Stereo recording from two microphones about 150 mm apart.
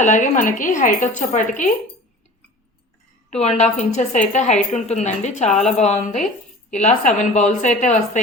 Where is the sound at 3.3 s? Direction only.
45° left (ahead or behind).